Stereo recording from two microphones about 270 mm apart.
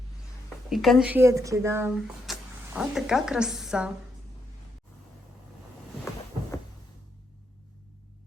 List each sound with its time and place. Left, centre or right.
0.7 s speech: centre